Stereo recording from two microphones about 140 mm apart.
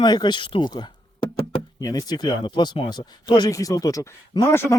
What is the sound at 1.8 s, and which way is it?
Speech, 25° left (ahead or behind).